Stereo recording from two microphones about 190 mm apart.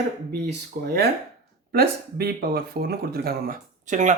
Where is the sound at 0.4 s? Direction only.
60° right (ahead or behind).